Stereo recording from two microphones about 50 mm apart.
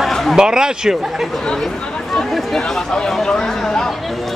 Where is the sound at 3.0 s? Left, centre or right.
Centre.